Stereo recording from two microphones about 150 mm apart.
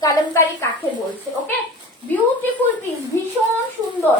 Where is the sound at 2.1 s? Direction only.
10° left (ahead or behind).